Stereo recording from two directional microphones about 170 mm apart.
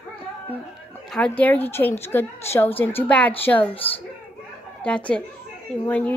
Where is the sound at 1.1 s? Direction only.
10° left (ahead or behind).